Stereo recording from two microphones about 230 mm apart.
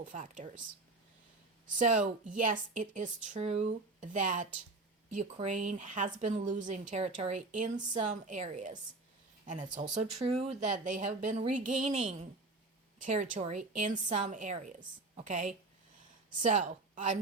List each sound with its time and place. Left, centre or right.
0.0 s a woman's voice: right
1.6 s a woman's voice: right